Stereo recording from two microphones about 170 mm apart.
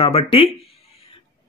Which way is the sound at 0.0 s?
35° left (ahead or behind).